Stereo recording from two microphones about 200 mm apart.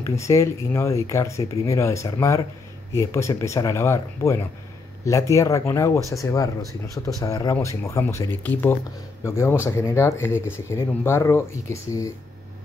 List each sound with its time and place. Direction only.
0.0 s speech: 15° left (ahead or behind)